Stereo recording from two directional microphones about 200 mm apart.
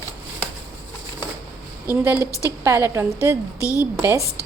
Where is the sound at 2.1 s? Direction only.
15° left (ahead or behind).